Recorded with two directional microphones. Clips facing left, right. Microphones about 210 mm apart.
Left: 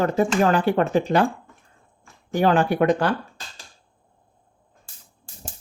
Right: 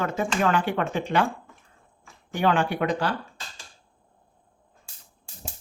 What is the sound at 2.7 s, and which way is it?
Speech, 55° left (ahead or behind).